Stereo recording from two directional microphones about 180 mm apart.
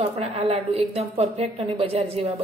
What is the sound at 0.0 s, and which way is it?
A woman's voice, 35° right (ahead or behind).